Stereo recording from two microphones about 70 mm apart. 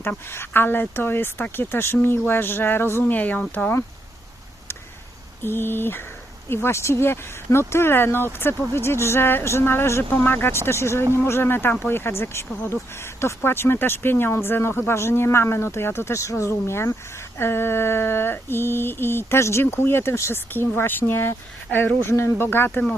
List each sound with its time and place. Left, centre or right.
0.0 s mantra: left
3.0 s speech: left
5.4 s mantra: left
22.4 s speech: left